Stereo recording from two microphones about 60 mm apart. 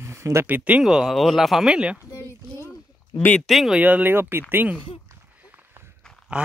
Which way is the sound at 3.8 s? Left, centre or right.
Right.